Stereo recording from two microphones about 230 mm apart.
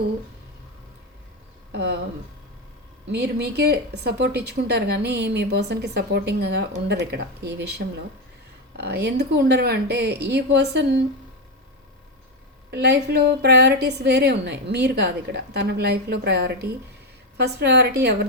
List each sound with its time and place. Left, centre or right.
1.7 s speech: right
3.1 s speech: right
12.7 s speech: right